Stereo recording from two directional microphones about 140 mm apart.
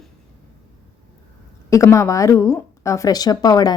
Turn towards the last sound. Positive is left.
turn(degrees=25)  # may be behind; listen again after turning